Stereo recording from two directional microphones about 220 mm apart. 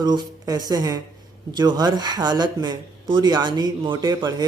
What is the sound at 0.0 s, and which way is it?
Speech, 20° right (ahead or behind).